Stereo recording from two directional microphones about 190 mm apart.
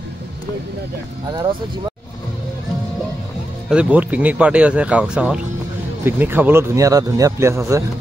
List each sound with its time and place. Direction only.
1.3 s speech: 25° right (ahead or behind)
3.6 s speech: 5° right (ahead or behind)